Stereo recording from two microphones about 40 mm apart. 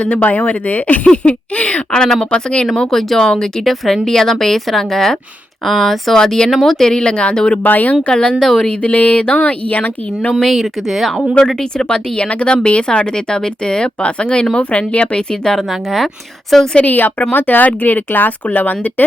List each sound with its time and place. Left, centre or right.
0.2 s speech: left
1.0 s speech: left
1.9 s speech: left
3.6 s speech: centre
6.1 s speech: centre
7.6 s speech: left
8.1 s speech: left
8.8 s speech: left
10.4 s speech: centre
11.3 s speech: centre
12.2 s speech: left
15.5 s speech: centre
16.8 s speech: left